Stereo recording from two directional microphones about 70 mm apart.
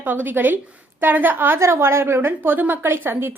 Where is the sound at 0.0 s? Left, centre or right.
Right.